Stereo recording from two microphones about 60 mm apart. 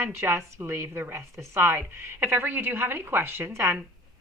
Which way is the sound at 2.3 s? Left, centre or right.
Right.